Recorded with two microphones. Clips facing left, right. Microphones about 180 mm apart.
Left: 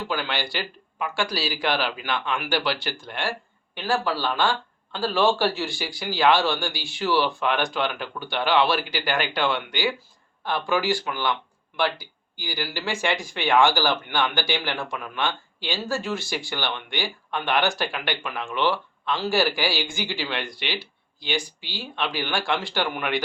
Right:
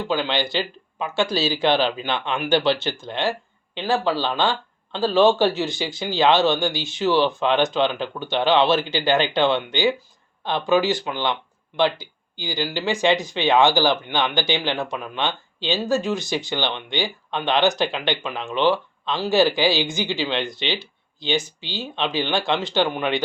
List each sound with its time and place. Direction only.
0.1 s speech: 20° right (ahead or behind)